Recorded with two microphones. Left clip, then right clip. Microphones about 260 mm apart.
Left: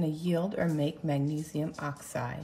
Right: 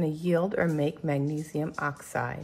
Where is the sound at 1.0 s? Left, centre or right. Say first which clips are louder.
Right 3 dB; centre.